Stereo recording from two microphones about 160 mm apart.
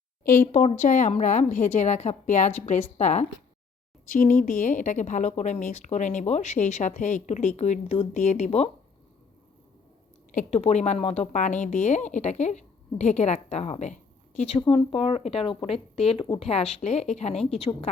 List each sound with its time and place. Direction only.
0.3 s a woman's voice: 50° left (ahead or behind)
4.1 s a woman's voice: 55° left (ahead or behind); by 8.7 s 40° left (ahead or behind)
10.3 s a woman's voice: 45° left (ahead or behind)
14.6 s speech: 35° left (ahead or behind)